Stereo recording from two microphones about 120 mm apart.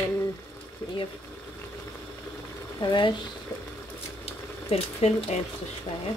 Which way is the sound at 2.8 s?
40° left (ahead or behind).